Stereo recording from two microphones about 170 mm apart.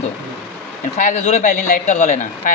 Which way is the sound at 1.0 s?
45° left (ahead or behind).